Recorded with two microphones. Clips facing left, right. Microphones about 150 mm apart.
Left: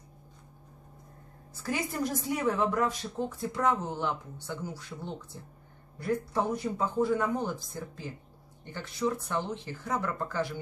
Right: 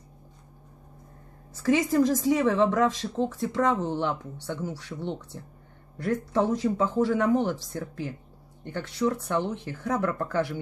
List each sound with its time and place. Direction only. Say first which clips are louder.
1.5 s a woman's voice: right 10 dB; 90° right
8.6 s speech: right 4 dB; 65° right (ahead or behind)